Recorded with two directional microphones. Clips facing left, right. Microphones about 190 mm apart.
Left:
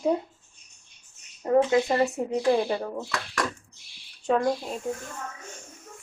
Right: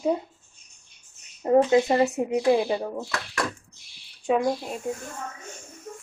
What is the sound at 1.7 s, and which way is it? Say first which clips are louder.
Speech: right 3 dB; 20° right (ahead or behind).